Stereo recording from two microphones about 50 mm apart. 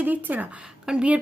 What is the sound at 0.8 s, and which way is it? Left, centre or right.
Speech, centre.